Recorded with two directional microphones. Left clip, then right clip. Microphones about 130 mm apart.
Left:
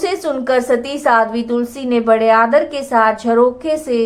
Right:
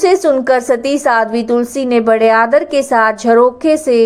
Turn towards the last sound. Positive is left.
turn(degrees=-35)  # may be behind; listen again after turning